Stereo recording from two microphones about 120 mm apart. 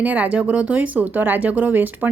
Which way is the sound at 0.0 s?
15° right (ahead or behind).